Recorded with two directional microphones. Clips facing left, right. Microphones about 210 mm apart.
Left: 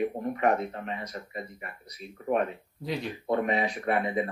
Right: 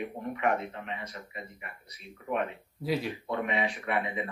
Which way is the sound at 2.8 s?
5° right (ahead or behind).